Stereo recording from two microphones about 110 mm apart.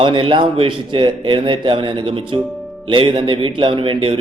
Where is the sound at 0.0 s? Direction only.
50° right (ahead or behind).